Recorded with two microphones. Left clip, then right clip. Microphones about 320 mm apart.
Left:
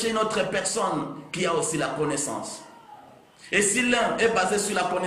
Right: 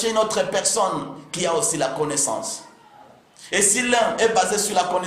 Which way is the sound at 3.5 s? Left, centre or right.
Right.